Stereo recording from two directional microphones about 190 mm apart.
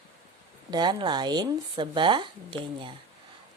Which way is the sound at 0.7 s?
25° right (ahead or behind).